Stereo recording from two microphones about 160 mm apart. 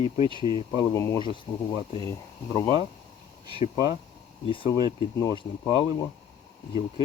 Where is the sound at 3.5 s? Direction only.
30° right (ahead or behind).